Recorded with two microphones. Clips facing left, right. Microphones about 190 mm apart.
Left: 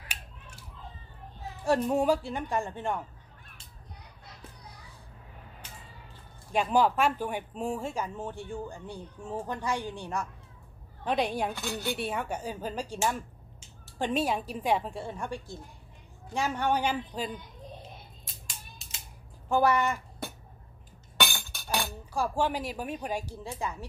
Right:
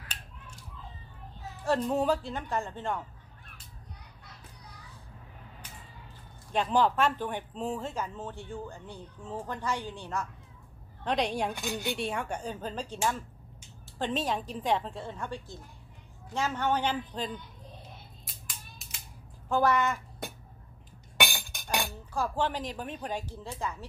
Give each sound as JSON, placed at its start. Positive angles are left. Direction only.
{"t": 1.6, "sound": "speech", "side_deg": 10}
{"t": 6.5, "sound": "speech", "side_deg": 10}
{"t": 11.1, "sound": "speech", "side_deg": 5}
{"t": 11.5, "sound": "speech", "side_deg": -15}
{"t": 11.9, "sound": "speech", "side_deg": 5}
{"t": 19.5, "sound": "speech", "side_deg": 15}
{"t": 21.2, "sound": "chink", "side_deg": -15}
{"t": 21.8, "sound": "speech", "side_deg": 10}